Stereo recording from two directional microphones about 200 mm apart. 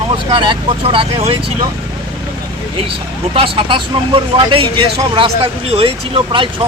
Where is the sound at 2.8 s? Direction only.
25° right (ahead or behind).